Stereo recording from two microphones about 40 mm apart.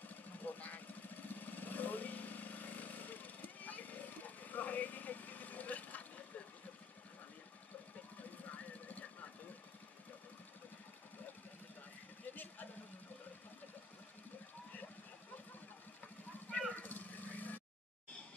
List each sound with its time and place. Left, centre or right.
0.1 s vehicle: left
8.2 s vehicle: left
16.4 s a sound: left
16.7 s vehicle: left